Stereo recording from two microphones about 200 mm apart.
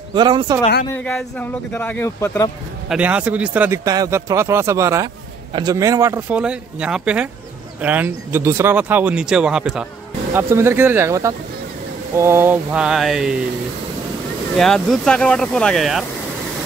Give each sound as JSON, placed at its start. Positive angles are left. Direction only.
{"t": 0.1, "sound": "speech", "side_deg": -20}
{"t": 0.9, "sound": "speech", "side_deg": 5}
{"t": 2.9, "sound": "speech", "side_deg": -5}
{"t": 14.6, "sound": "speech", "side_deg": 0}